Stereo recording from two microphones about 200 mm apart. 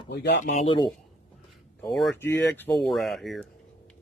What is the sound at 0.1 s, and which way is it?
Speech, 55° left (ahead or behind).